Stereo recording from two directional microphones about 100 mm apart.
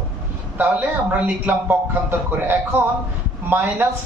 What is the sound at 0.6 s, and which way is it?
Speech, 20° right (ahead or behind).